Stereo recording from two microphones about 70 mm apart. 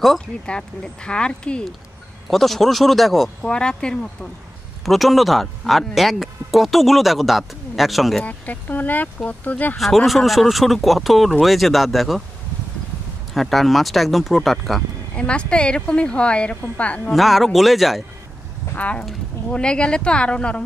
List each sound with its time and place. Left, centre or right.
0.5 s a woman's voice: centre
2.2 s speech: centre
3.4 s a woman's voice: centre
4.8 s speech: centre
8.2 s speech: left
9.8 s speech: centre
13.3 s speech: centre
15.1 s a woman's voice: centre
17.1 s speech: centre
18.8 s a woman's voice: centre